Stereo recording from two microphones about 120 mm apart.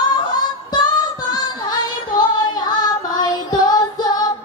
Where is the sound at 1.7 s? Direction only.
35° left (ahead or behind).